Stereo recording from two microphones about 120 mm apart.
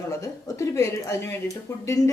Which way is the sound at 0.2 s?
25° left (ahead or behind).